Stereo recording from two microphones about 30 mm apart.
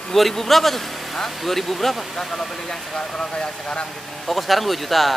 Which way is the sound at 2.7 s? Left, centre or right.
Centre.